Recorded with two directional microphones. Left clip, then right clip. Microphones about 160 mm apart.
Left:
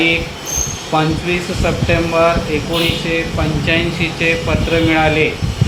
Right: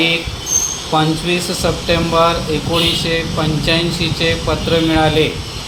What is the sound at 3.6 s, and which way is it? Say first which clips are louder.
Speech: left 1 dB; 30° right (ahead or behind).